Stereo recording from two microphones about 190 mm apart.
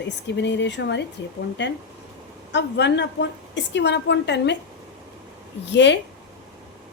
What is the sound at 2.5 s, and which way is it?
A woman's voice, 65° left (ahead or behind).